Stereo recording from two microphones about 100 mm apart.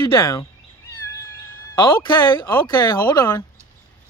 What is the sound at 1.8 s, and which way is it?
Speech, 45° left (ahead or behind).